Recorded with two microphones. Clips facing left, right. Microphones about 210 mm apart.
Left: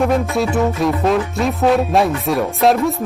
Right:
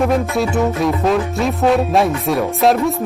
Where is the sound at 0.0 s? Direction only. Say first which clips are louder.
Even; centre (ahead or behind).